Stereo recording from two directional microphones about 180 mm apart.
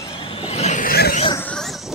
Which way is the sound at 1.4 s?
5° left (ahead or behind).